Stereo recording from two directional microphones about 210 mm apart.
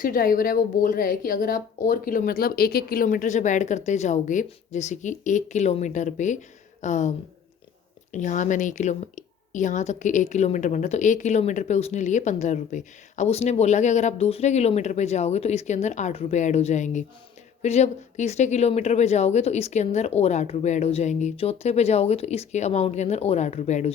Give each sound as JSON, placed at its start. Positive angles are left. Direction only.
{"t": 0.0, "sound": "a woman's voice", "side_deg": 40}
{"t": 8.1, "sound": "a woman's voice", "side_deg": 35}